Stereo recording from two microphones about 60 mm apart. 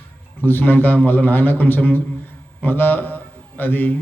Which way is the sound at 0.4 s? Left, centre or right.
Left.